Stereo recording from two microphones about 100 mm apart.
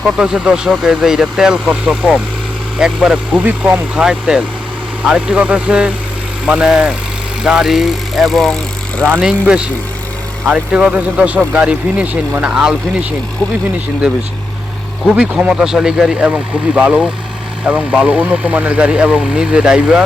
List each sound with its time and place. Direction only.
0.0 s speech: 10° right (ahead or behind)
10.4 s speech: 10° right (ahead or behind)
15.1 s speech: 10° right (ahead or behind)